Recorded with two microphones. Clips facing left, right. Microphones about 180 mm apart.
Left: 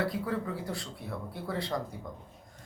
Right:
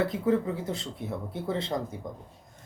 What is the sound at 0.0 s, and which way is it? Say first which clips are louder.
Speech: right 6 dB; 20° right (ahead or behind).